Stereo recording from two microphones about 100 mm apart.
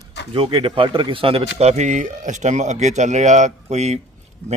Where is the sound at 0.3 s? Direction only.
65° right (ahead or behind).